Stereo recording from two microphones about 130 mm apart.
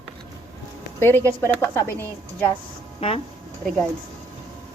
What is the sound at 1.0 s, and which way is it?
A woman's voice, 15° left (ahead or behind).